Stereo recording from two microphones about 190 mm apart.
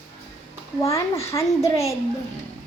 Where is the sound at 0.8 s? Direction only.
15° left (ahead or behind).